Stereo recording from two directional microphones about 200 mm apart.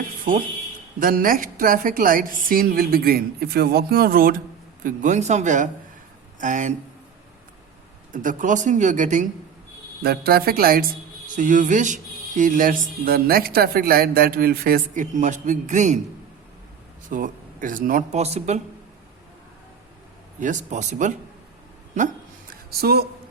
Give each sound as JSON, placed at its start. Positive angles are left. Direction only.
{"t": 0.9, "sound": "speech", "side_deg": -45}
{"t": 8.1, "sound": "speech", "side_deg": -40}
{"t": 10.0, "sound": "speech", "side_deg": -50}
{"t": 17.1, "sound": "speech", "side_deg": -40}
{"t": 20.4, "sound": "speech", "side_deg": -40}
{"t": 22.8, "sound": "speech", "side_deg": -50}